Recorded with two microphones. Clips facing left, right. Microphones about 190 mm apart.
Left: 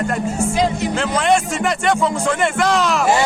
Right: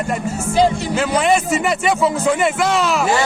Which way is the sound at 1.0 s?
5° right (ahead or behind).